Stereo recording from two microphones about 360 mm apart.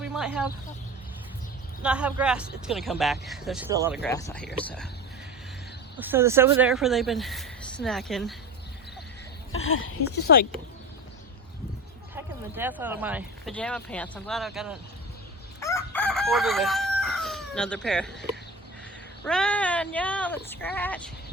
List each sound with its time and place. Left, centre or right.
0.0 s speech: centre
1.8 s speech: centre
4.0 s speech: centre
6.0 s speech: centre
9.5 s speech: left
12.1 s speech: centre
15.6 s chicken: centre
19.2 s speech: centre